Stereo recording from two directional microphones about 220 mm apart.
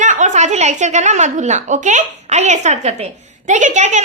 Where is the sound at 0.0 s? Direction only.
35° right (ahead or behind).